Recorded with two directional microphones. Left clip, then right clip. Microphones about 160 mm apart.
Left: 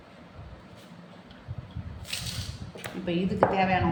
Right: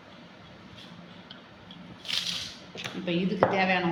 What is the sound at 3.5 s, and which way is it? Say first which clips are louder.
Speech: even; 30° left (ahead or behind).